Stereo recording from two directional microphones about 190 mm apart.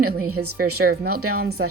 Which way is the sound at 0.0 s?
50° right (ahead or behind).